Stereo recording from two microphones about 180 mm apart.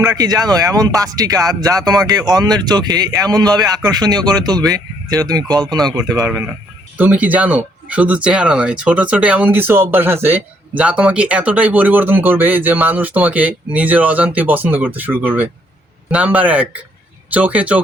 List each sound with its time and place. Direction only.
0.1 s speech: 20° right (ahead or behind)